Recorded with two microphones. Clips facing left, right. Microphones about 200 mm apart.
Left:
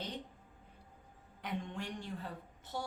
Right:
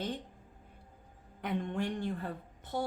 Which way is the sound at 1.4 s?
55° right (ahead or behind).